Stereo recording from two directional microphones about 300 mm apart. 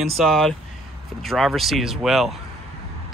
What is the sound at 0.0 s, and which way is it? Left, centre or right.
Speech, centre.